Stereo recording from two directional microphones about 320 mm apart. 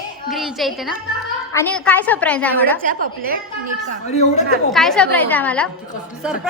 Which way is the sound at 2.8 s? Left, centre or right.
Right.